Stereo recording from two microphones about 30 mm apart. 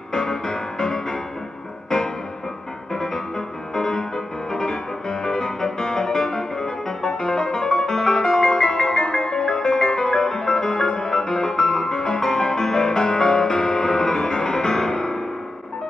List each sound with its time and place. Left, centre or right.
0.2 s music: centre
2.9 s music: centre